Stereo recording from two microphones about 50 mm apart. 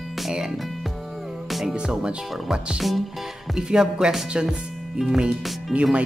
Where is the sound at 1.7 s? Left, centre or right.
Centre.